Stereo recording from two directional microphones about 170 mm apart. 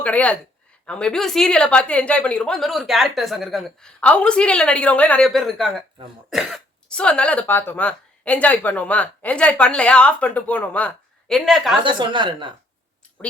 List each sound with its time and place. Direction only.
0.0 s a woman's voice: 10° left (ahead or behind)
11.8 s a woman's voice: 30° right (ahead or behind)